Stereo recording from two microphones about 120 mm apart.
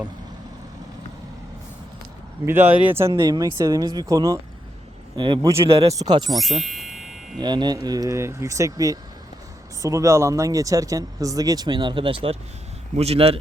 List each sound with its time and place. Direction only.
2.5 s speech: 15° right (ahead or behind)
3.2 s speech: 30° right (ahead or behind)
5.1 s speech: 40° right (ahead or behind)
5.6 s speech: 55° right (ahead or behind)
5.9 s speech: 35° right (ahead or behind)
6.3 s a sound: centre (ahead or behind)
7.3 s speech: 35° right (ahead or behind); by 13.4 s 55° right (ahead or behind)